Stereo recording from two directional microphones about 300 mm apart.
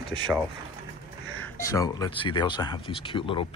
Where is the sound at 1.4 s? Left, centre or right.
Centre.